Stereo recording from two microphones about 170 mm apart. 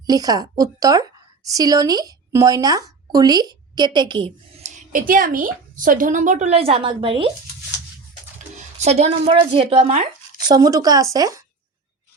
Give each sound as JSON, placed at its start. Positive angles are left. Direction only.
{"t": 0.0, "sound": "speech", "side_deg": -20}
{"t": 4.6, "sound": "a woman's voice", "side_deg": -50}
{"t": 8.8, "sound": "a woman's voice", "side_deg": -40}
{"t": 10.5, "sound": "speech", "side_deg": -20}